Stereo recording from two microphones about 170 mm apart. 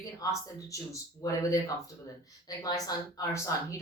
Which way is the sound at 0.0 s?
20° left (ahead or behind).